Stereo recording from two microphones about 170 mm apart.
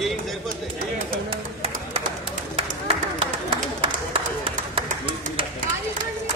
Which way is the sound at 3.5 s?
30° right (ahead or behind).